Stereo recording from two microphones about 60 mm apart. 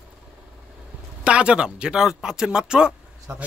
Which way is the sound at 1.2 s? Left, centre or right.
Centre.